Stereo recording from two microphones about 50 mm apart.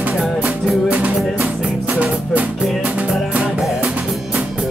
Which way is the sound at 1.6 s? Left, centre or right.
Right.